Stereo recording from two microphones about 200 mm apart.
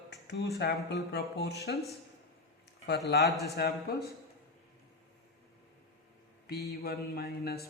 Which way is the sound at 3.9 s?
50° left (ahead or behind).